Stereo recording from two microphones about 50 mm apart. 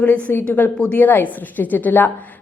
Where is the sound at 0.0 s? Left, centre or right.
Left.